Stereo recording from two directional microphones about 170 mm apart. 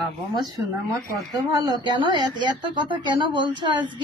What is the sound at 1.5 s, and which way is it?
A woman's voice, 25° right (ahead or behind).